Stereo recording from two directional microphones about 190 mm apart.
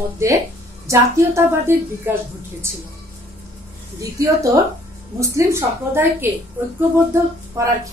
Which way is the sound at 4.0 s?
15° right (ahead or behind).